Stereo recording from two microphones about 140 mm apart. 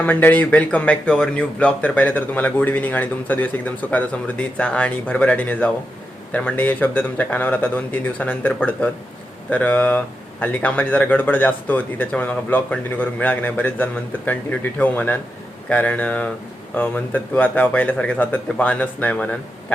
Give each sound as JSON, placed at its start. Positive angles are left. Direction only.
{"t": 0.0, "sound": "speech", "side_deg": 10}